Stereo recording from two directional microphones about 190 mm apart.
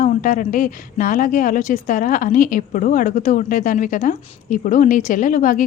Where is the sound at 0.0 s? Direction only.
45° left (ahead or behind).